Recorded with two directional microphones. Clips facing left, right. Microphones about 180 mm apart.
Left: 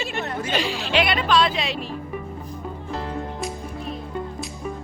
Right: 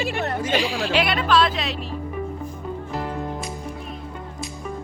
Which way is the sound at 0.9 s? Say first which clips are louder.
Left 1 dB; 5° right (ahead or behind).